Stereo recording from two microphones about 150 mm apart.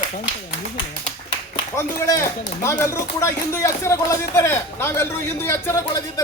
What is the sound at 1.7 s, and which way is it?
Speech, 20° left (ahead or behind).